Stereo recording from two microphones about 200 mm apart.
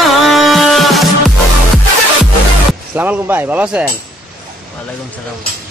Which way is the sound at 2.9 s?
10° right (ahead or behind).